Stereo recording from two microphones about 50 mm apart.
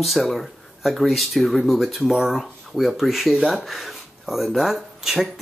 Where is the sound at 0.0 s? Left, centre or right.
Centre.